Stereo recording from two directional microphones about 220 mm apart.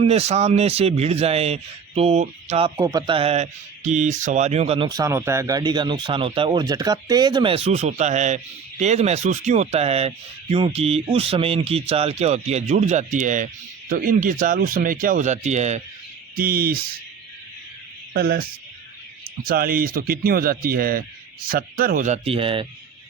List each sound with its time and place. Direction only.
0.0 s speech: 30° right (ahead or behind)
16.3 s speech: 40° right (ahead or behind)
18.1 s speech: 45° right (ahead or behind)
19.5 s speech: 40° right (ahead or behind); by 22.6 s 25° right (ahead or behind)